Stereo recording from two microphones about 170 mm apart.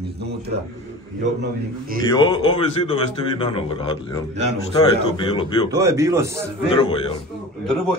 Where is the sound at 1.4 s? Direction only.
60° right (ahead or behind).